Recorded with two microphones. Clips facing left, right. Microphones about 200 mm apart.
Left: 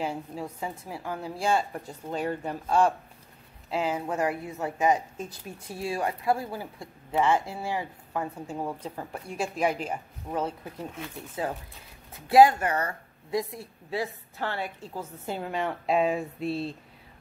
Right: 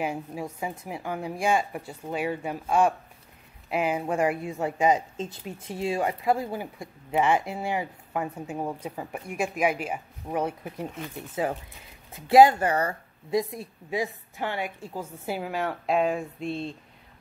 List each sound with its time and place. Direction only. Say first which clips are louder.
0.0 s a woman's voice: right 2 dB; 15° right (ahead or behind)
12.3 s a woman's voice: right 2 dB; 25° right (ahead or behind); by 16.7 s 5° left (ahead or behind)